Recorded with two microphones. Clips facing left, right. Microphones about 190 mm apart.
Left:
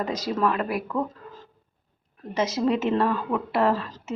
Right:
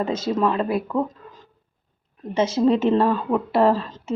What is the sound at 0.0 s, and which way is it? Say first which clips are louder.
A woman's voice: right 3 dB; 25° right (ahead or behind).